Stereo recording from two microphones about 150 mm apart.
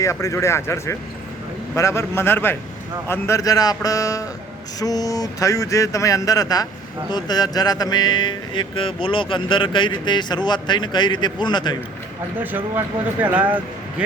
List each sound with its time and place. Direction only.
0.0 s music: 20° left (ahead or behind)
1.7 s a man's voice: 20° left (ahead or behind)
3.1 s music: 20° left (ahead or behind)
12.4 s speech: 15° right (ahead or behind)